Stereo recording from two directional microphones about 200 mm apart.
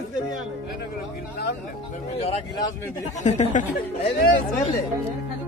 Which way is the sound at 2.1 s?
30° left (ahead or behind).